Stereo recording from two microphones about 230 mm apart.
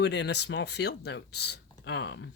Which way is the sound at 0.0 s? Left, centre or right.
Left.